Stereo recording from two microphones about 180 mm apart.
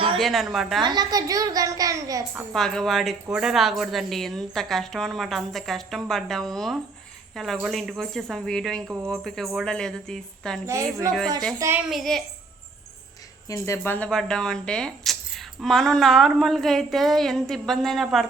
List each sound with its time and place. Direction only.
0.2 s speech: centre (ahead or behind)
0.8 s a woman's voice: 25° right (ahead or behind)
2.5 s speech: 5° left (ahead or behind)
10.7 s a woman's voice: 15° right (ahead or behind)
11.9 s speech: centre (ahead or behind)
13.5 s speech: 15° left (ahead or behind)